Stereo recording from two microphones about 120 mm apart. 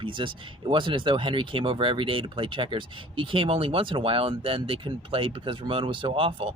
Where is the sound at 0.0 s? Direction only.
45° right (ahead or behind).